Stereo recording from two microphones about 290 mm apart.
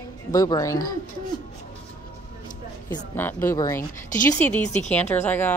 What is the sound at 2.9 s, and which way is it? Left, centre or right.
A woman's voice, centre.